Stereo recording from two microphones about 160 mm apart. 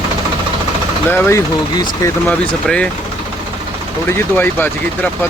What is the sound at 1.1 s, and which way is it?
Speech, 15° left (ahead or behind).